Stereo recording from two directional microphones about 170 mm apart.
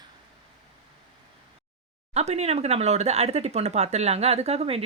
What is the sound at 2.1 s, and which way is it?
Speech, 40° right (ahead or behind).